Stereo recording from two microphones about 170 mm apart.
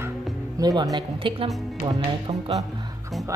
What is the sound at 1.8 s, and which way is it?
Music, 35° right (ahead or behind).